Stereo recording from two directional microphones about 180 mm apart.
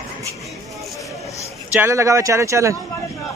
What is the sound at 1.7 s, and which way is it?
Speech, 15° right (ahead or behind).